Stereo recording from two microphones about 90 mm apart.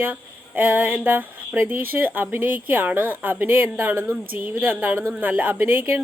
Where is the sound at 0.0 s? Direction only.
20° right (ahead or behind).